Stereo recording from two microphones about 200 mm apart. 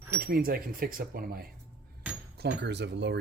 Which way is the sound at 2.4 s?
60° right (ahead or behind).